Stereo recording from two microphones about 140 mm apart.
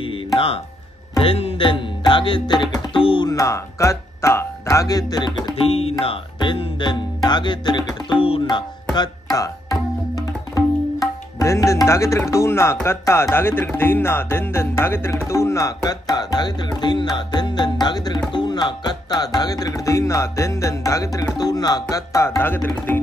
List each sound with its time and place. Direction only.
1.1 s music: 40° left (ahead or behind)
3.3 s music: 20° left (ahead or behind)
5.6 s music: 45° left (ahead or behind)
8.9 s tabla: 30° left (ahead or behind)
11.3 s music: 20° left (ahead or behind)